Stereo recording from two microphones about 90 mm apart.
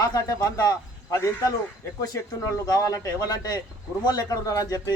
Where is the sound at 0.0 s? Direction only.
40° left (ahead or behind).